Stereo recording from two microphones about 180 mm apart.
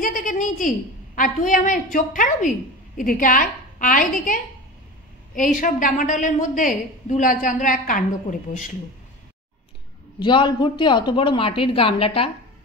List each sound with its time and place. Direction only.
0.0 s a woman's voice: 50° left (ahead or behind)
10.1 s a woman's voice: 25° left (ahead or behind)